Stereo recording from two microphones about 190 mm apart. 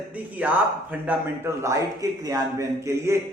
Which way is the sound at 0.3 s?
10° right (ahead or behind).